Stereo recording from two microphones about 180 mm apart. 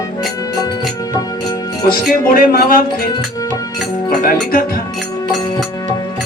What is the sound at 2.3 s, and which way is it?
Music, 50° left (ahead or behind).